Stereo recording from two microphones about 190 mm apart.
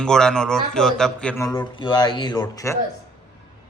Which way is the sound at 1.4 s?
20° left (ahead or behind).